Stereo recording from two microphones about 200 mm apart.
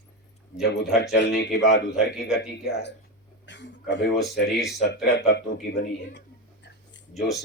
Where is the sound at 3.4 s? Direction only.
60° left (ahead or behind).